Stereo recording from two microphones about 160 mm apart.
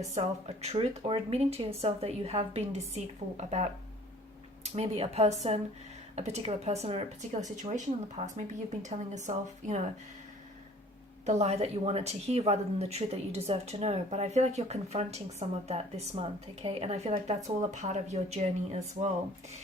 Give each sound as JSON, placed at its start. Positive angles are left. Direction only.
{"t": 0.1, "sound": "a woman's voice", "side_deg": -40}
{"t": 4.6, "sound": "a woman's voice", "side_deg": -40}
{"t": 11.3, "sound": "a woman's voice", "side_deg": -40}